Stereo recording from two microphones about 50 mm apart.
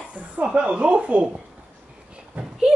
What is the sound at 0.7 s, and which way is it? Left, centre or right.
Speech, right.